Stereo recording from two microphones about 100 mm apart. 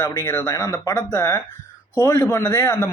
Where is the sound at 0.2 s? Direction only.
30° left (ahead or behind).